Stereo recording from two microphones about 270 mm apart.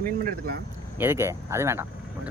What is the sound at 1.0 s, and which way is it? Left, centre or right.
Speech, centre.